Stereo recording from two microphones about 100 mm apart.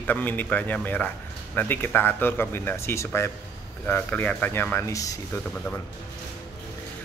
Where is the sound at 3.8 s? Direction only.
15° left (ahead or behind).